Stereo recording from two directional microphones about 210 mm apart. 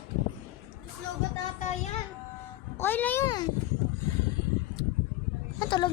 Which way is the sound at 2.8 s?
10° left (ahead or behind).